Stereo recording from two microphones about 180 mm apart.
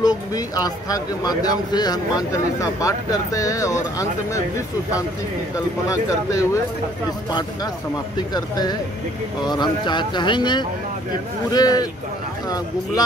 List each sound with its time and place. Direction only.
0.0 s speech: 20° left (ahead or behind)
5.9 s speech: 20° left (ahead or behind)